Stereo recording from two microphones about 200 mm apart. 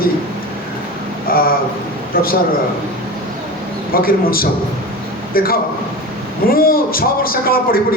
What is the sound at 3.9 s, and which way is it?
A man's voice, 45° left (ahead or behind).